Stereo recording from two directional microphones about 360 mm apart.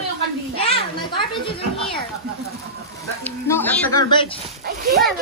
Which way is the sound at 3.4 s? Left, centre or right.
Centre.